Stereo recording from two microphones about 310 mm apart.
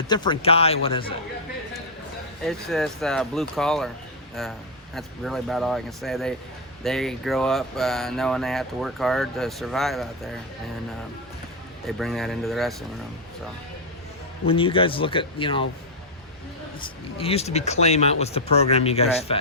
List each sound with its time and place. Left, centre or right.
0.1 s speech: centre
2.4 s speech: centre
11.9 s speech: centre
14.4 s speech: centre
16.8 s speech: centre